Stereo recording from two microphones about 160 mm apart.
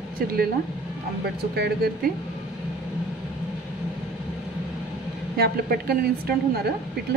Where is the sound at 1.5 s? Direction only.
85° right.